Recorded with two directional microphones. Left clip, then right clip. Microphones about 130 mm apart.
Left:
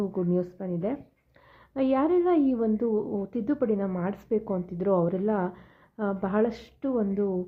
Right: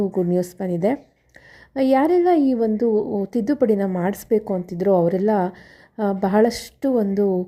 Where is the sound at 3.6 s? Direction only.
55° right (ahead or behind).